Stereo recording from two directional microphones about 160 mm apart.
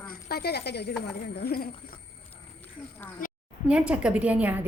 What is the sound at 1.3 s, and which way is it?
Speech, 75° left (ahead or behind).